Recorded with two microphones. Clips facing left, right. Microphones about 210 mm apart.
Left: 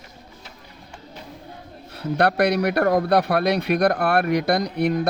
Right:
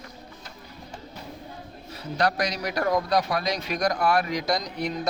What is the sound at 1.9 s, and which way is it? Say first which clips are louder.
Speech: left 5 dB; 60° left (ahead or behind).